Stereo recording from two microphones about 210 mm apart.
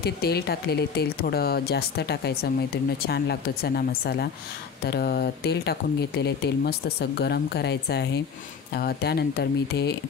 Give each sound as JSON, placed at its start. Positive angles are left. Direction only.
{"t": 0.0, "sound": "speech", "side_deg": 50}